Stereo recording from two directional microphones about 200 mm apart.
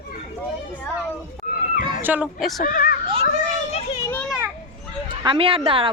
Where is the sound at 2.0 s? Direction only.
10° right (ahead or behind).